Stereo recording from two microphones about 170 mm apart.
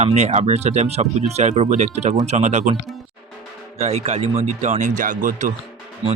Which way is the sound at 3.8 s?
40° right (ahead or behind).